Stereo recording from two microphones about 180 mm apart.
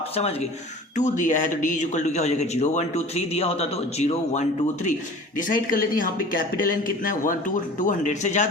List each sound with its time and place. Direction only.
0.9 s speech: 45° left (ahead or behind)